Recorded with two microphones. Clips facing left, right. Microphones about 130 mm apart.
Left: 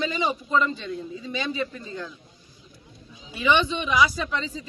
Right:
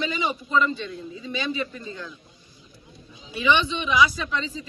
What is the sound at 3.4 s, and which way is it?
Speech, 40° left (ahead or behind).